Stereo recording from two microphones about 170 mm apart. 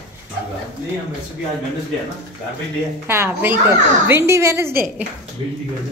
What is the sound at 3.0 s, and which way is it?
A woman's voice, 15° right (ahead or behind).